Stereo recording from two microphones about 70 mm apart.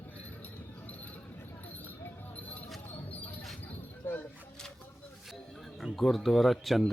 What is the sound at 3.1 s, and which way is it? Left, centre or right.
Music, left.